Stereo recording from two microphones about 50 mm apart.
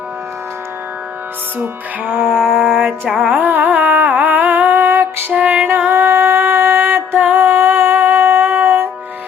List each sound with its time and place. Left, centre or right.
2.0 s music: right
3.2 s carnatic music: right
5.3 s music: right
5.9 s a sound: right
7.3 s music: right